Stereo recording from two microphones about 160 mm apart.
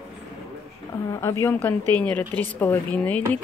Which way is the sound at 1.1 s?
20° left (ahead or behind).